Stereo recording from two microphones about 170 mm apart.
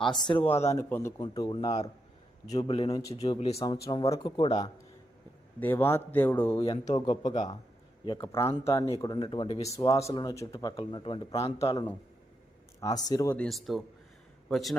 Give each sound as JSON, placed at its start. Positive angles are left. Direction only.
{"t": 0.3, "sound": "speech", "side_deg": 30}
{"t": 0.7, "sound": "speech", "side_deg": 15}
{"t": 1.2, "sound": "speech", "side_deg": 25}
{"t": 2.9, "sound": "speech", "side_deg": 20}
{"t": 3.3, "sound": "speech", "side_deg": 40}
{"t": 3.8, "sound": "speech", "side_deg": 20}
{"t": 5.5, "sound": "speech", "side_deg": 10}
{"t": 6.6, "sound": "speech", "side_deg": 40}
{"t": 8.0, "sound": "a man's voice", "side_deg": 30}
{"t": 8.3, "sound": "speech", "side_deg": 15}
{"t": 9.0, "sound": "speech", "side_deg": 25}
{"t": 9.6, "sound": "speech", "side_deg": 20}
{"t": 11.6, "sound": "speech", "side_deg": 20}
{"t": 13.3, "sound": "speech", "side_deg": 5}